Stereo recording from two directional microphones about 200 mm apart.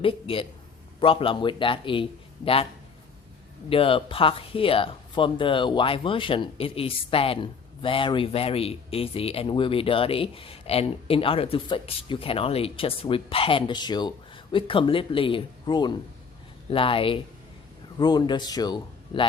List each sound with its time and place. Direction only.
0.0 s speech: 25° left (ahead or behind)
3.7 s speech: 25° left (ahead or behind)